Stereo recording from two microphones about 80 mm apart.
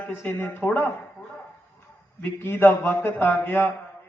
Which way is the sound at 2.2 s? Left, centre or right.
Left.